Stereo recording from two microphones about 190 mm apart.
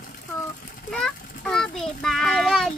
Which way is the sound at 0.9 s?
5° left (ahead or behind).